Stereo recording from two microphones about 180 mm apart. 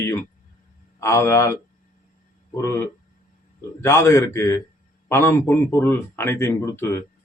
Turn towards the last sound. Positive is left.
turn(degrees=15)  # may be behind; listen again after turning